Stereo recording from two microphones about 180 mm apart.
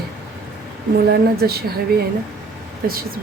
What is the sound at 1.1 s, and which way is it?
Speech, 60° right (ahead or behind).